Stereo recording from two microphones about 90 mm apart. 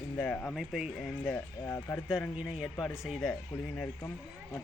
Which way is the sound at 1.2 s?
25° left (ahead or behind).